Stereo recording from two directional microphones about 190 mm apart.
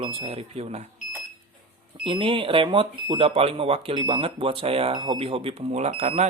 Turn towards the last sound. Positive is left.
turn(degrees=-35)  # may be behind; listen again after turning